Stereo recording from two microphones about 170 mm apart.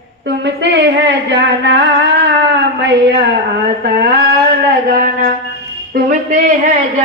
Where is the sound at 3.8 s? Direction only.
65° right (ahead or behind).